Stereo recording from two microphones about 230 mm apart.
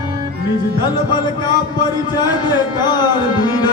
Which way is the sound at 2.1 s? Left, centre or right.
Centre.